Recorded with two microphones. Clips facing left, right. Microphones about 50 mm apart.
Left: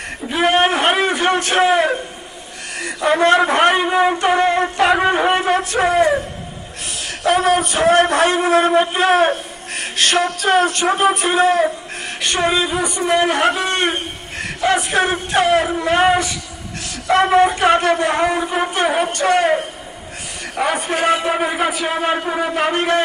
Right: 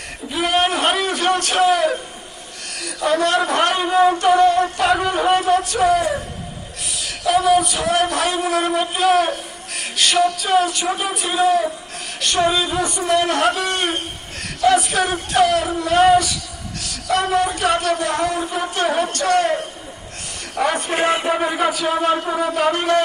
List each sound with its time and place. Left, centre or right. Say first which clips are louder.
0.3 s a sound: left 3 dB; left
2.7 s speech: left 2 dB; left
7.0 s a sound: left 1 dB; left
12.2 s speech: even; left
12.7 s speech: left 1 dB; centre
14.4 s music: right 2 dB; left
15.8 s speech: right 1 dB; left